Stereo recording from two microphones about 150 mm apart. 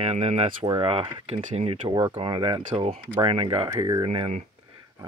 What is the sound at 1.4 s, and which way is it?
Speech, 55° right (ahead or behind).